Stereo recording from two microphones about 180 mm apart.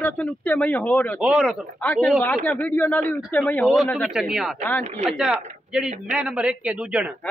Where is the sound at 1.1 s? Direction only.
5° right (ahead or behind).